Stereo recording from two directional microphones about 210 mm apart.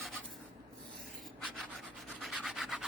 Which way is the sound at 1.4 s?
Centre (ahead or behind).